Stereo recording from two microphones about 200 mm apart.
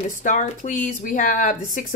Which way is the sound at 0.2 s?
40° left (ahead or behind).